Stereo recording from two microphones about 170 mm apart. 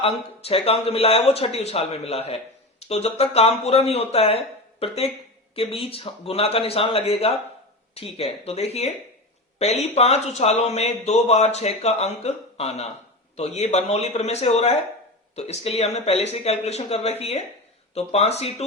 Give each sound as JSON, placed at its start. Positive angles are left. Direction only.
{"t": 0.0, "sound": "speech", "side_deg": 35}